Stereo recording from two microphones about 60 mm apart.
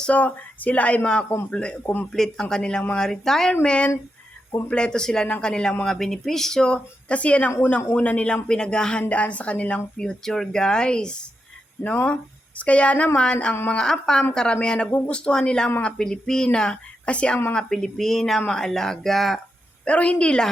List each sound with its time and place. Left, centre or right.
0.1 s speech: left; by 19.4 s centre
19.8 s speech: left